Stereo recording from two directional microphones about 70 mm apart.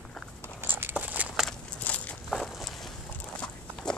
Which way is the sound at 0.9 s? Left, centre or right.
Right.